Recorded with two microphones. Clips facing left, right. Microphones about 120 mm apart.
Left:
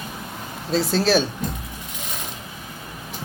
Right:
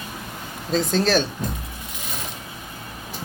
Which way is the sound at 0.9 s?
5° left (ahead or behind).